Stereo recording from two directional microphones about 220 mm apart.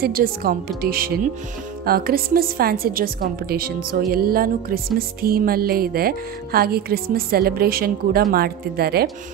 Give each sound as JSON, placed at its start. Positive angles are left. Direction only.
{"t": 0.0, "sound": "speech", "side_deg": -40}
{"t": 1.9, "sound": "music", "side_deg": -45}